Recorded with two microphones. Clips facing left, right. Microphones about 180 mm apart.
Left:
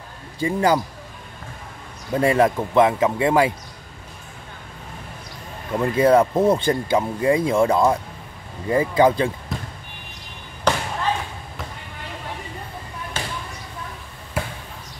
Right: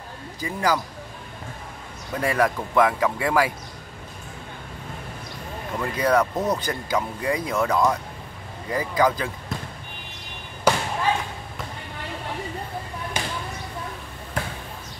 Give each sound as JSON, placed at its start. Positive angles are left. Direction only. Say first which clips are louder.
{"t": 0.4, "sound": "speech", "louder": "left 5 dB", "side_deg": 25}
{"t": 2.1, "sound": "speech", "louder": "left 5 dB", "side_deg": 25}
{"t": 5.8, "sound": "speech", "louder": "left 6 dB", "side_deg": 25}
{"t": 9.5, "sound": "basketball bounce", "louder": "left 1 dB", "side_deg": 0}
{"t": 13.2, "sound": "basketball bounce", "louder": "even", "side_deg": -15}
{"t": 14.3, "sound": "basketball bounce", "louder": "left 2 dB", "side_deg": 5}